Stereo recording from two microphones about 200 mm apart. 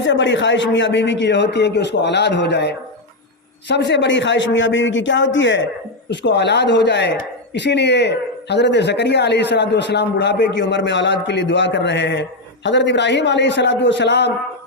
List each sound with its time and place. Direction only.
0.0 s a man's voice: 65° left (ahead or behind)